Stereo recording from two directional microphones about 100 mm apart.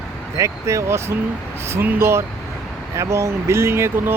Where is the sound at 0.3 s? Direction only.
30° right (ahead or behind).